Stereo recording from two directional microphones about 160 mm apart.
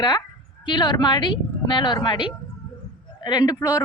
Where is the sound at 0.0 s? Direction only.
25° left (ahead or behind).